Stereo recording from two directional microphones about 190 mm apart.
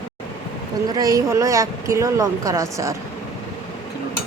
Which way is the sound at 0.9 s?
20° right (ahead or behind).